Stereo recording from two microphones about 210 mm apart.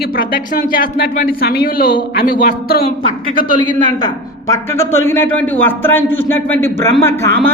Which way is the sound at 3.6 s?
20° left (ahead or behind).